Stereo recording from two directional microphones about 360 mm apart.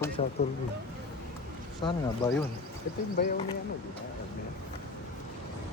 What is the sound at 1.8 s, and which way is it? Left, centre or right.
Speech, centre.